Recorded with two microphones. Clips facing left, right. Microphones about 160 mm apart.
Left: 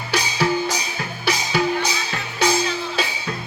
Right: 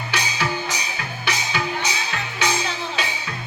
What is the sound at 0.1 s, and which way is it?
Music, 40° left (ahead or behind).